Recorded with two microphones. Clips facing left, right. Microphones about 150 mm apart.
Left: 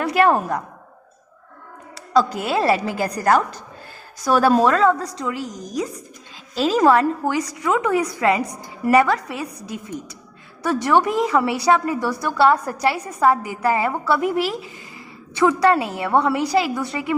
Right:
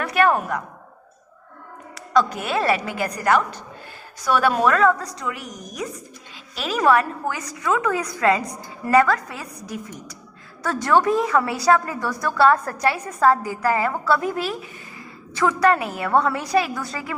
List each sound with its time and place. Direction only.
0.0 s a woman's voice: 30° left (ahead or behind)
2.0 s a woman's voice: 30° left (ahead or behind)